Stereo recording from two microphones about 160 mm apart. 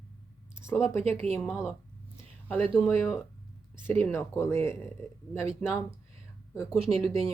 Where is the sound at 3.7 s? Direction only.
15° left (ahead or behind).